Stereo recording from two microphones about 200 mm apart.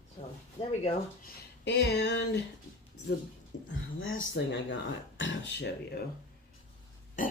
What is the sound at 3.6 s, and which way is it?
Speech, 80° left.